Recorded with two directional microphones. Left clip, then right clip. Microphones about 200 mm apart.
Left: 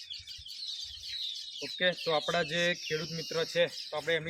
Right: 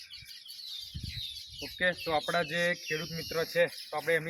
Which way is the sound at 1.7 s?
35° left (ahead or behind).